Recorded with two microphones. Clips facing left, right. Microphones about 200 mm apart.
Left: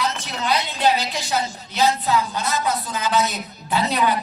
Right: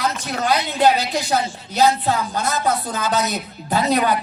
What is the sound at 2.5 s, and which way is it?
A woman's voice, 50° right (ahead or behind).